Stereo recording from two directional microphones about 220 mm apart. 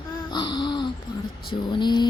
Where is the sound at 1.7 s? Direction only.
20° left (ahead or behind).